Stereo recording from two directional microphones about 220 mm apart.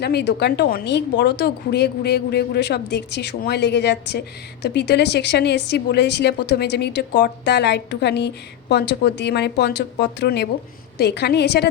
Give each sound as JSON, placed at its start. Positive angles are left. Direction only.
{"t": 0.0, "sound": "a woman's voice", "side_deg": 50}